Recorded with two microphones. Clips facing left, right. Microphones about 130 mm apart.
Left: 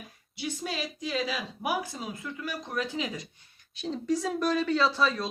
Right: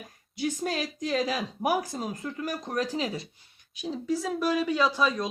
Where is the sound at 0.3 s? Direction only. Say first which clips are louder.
Right 5 dB; 45° right (ahead or behind).